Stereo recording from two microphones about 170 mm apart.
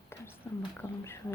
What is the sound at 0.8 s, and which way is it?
Speech, 15° left (ahead or behind).